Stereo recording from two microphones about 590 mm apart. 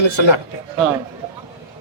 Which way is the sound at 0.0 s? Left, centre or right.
Left.